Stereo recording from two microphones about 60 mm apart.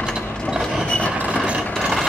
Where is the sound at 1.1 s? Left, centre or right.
Right.